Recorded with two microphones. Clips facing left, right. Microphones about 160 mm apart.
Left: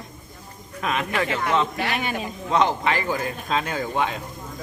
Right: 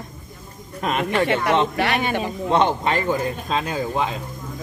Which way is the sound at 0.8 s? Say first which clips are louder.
Right 3 dB; 40° right (ahead or behind).